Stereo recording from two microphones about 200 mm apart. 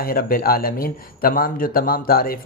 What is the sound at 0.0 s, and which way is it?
Speech, 45° left (ahead or behind).